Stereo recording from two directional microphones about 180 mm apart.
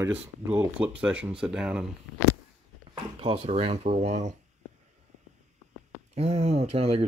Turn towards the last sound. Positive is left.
turn(degrees=-35)  # may be behind; listen again after turning